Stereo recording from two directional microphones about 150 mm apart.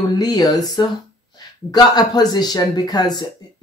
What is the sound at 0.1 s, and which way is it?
Speech, 25° left (ahead or behind).